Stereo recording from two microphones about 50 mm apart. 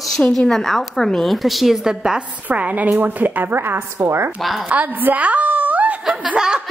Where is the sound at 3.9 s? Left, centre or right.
Right.